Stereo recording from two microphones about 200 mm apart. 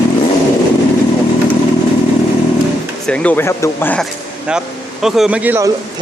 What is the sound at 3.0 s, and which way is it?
Speech, 5° left (ahead or behind).